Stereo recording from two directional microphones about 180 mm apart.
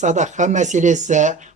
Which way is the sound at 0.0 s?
40° right (ahead or behind).